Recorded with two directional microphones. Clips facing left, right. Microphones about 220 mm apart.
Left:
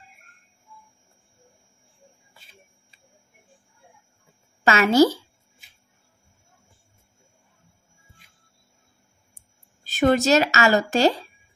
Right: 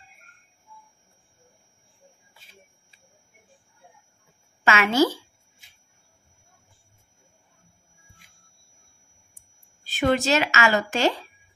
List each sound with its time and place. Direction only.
4.6 s a woman's voice: 40° left (ahead or behind)
9.8 s a woman's voice: 40° left (ahead or behind)